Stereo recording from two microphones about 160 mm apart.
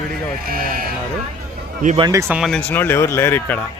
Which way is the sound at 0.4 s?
65° right (ahead or behind).